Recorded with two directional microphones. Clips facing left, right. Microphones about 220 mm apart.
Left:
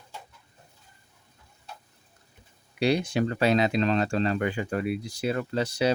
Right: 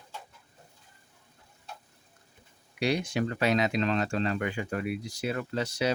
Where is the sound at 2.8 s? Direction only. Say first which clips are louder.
Left 4 dB; 30° left (ahead or behind).